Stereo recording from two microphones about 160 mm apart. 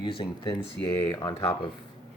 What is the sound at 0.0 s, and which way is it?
Speech, 35° left (ahead or behind).